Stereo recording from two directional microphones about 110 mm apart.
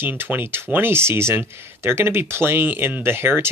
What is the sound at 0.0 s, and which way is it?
Speech, 20° right (ahead or behind).